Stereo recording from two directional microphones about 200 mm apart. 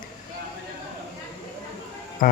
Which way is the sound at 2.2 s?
45° left (ahead or behind).